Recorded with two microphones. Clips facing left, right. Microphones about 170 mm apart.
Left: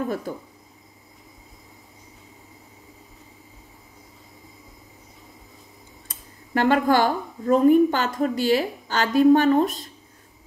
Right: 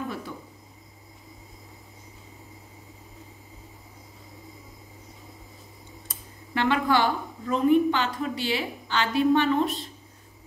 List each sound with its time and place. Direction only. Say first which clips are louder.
0.3 s a woman's voice: left 7 dB; 45° left (ahead or behind)
6.5 s a woman's voice: left 4 dB; 45° left (ahead or behind)